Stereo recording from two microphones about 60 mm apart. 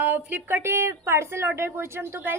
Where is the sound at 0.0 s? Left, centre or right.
Right.